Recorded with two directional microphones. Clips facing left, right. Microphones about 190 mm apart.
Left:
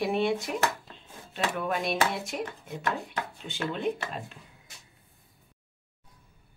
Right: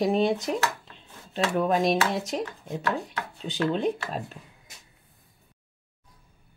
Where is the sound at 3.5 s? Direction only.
40° right (ahead or behind).